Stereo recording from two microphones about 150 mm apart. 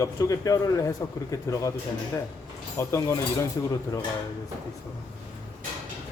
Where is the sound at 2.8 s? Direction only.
20° left (ahead or behind).